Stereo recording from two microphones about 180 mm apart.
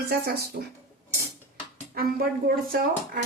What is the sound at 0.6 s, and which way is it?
Speech, 55° right (ahead or behind).